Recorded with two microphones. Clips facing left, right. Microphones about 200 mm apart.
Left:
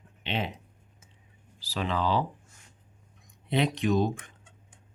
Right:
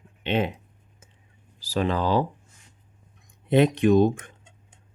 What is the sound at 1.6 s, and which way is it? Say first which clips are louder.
Speech: right 5 dB; 45° right (ahead or behind).